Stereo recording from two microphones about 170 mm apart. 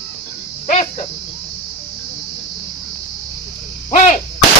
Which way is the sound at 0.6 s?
40° left (ahead or behind).